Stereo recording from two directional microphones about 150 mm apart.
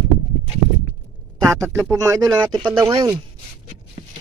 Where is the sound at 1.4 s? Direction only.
20° right (ahead or behind).